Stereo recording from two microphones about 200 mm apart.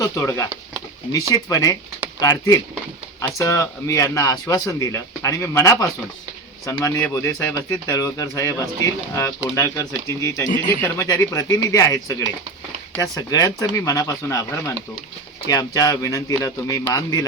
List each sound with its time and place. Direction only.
0.0 s speech: 15° left (ahead or behind)